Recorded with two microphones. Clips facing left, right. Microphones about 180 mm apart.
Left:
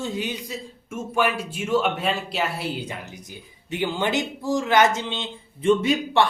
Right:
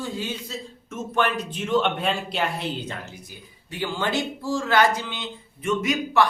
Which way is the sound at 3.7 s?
20° left (ahead or behind).